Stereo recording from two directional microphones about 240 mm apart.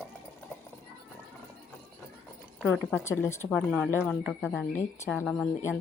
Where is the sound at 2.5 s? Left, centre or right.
Centre.